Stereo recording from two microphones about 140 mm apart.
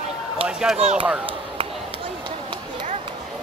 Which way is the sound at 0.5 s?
5° right (ahead or behind).